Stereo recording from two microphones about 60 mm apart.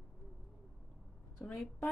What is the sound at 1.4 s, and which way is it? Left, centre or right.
Speech, centre.